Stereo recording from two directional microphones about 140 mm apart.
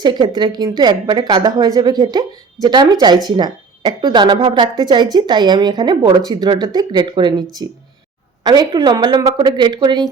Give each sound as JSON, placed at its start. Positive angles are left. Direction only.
{"t": 0.0, "sound": "a woman's voice", "side_deg": -35}
{"t": 8.4, "sound": "a woman's voice", "side_deg": -30}